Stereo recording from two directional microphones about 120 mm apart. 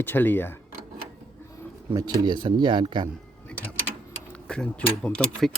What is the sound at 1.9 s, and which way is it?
Speech, 30° right (ahead or behind).